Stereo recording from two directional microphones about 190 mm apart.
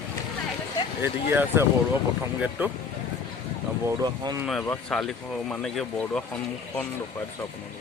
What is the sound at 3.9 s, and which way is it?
Speech, 20° right (ahead or behind).